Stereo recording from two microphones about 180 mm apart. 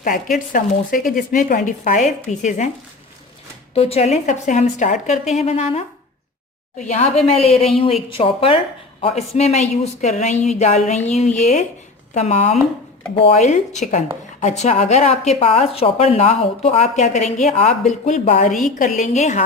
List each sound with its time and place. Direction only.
0.3 s a woman's voice: 50° left (ahead or behind)
3.8 s a woman's voice: 35° left (ahead or behind)